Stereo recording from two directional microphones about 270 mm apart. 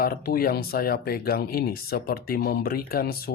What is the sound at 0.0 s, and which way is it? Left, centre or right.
Speech, left.